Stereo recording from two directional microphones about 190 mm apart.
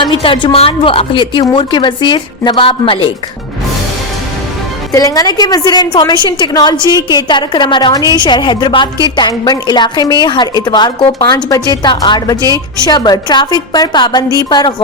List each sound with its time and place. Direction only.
0.0 s a woman's voice: 25° left (ahead or behind)
4.9 s a woman's voice: 20° left (ahead or behind)